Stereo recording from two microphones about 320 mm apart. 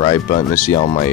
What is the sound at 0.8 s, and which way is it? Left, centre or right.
Speech, centre.